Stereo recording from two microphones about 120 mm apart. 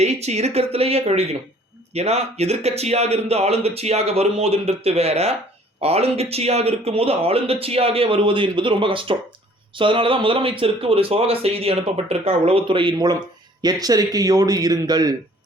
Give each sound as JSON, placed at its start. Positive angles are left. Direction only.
{"t": 0.0, "sound": "speech", "side_deg": -65}